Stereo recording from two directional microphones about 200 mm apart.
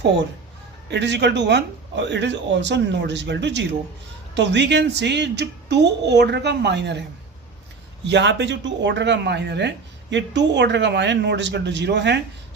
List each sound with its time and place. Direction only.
0.9 s speech: 60° right (ahead or behind)
8.0 s speech: 60° right (ahead or behind)